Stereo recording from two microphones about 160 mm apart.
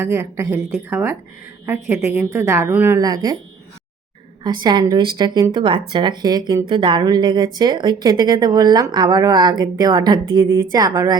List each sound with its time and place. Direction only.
0.0 s speech: 20° right (ahead or behind)
4.4 s speech: 25° right (ahead or behind)